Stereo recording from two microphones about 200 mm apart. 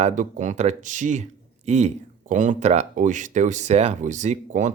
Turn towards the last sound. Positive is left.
turn(degrees=-35)  # may be behind; listen again after turning